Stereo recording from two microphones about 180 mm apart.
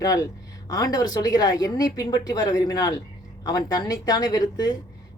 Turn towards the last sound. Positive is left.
turn(degrees=20)  # may be behind; listen again after turning